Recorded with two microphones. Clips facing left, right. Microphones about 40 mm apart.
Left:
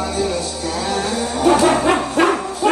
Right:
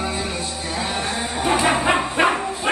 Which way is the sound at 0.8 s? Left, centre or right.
Right.